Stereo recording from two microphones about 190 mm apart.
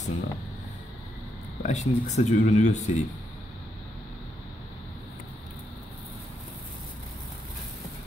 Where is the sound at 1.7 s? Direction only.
40° left (ahead or behind).